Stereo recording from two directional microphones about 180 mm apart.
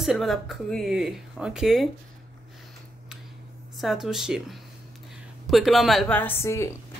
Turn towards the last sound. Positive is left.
turn(degrees=15)  # may be behind; listen again after turning